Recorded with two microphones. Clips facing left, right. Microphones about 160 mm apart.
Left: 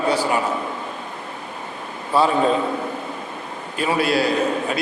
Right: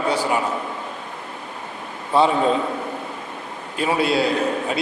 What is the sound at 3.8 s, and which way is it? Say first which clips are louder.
Speech: even; 25° right (ahead or behind).